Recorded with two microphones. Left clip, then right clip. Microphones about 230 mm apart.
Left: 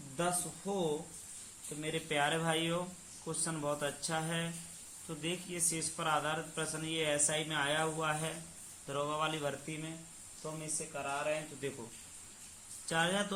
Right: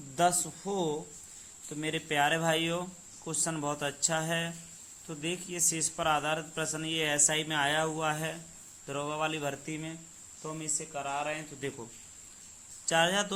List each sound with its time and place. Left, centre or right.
0.2 s speech: right
10.4 s speech: right
12.9 s speech: right